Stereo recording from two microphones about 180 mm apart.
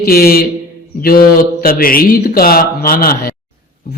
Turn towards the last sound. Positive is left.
turn(degrees=55)  # may be behind; listen again after turning